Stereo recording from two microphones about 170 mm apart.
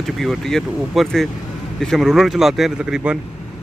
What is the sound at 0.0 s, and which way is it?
Speech, centre (ahead or behind).